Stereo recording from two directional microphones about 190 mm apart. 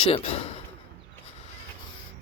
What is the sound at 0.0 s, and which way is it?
Speech, 30° left (ahead or behind).